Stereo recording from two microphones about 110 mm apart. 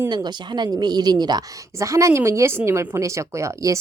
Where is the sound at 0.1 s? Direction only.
40° right (ahead or behind).